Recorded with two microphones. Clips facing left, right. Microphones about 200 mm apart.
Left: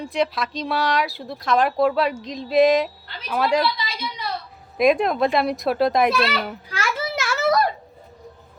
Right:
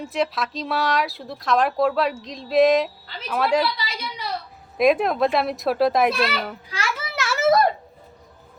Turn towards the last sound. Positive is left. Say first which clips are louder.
# right 2 dB
turn(degrees=-25)  # may be behind; listen again after turning